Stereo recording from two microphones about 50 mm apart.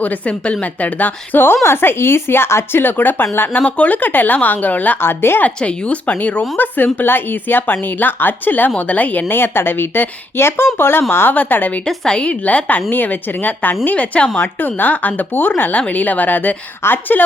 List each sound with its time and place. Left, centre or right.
0.0 s a woman's voice: left
2.8 s speech: left
3.6 s speech: left
4.9 s speech: left
5.5 s speech: left
9.3 s speech: left
11.3 s speech: left
11.9 s a woman's voice: centre
12.2 s speech: left
14.3 s speech: left